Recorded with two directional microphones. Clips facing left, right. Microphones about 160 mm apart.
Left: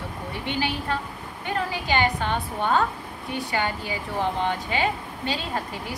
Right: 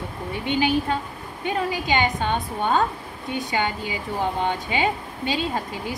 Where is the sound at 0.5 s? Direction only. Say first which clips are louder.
Right 6 dB; 20° right (ahead or behind).